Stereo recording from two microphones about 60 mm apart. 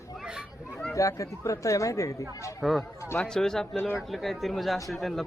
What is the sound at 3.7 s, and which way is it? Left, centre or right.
Speech, left.